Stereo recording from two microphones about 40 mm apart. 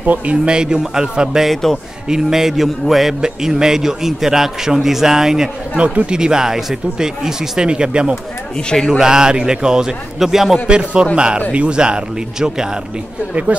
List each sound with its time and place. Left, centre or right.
0.0 s speech: right
0.5 s a man's voice: right; by 3.2 s centre
3.2 s a man's voice: centre
5.8 s a man's voice: right; by 10.6 s centre
10.7 s speech: right
13.5 s speech: right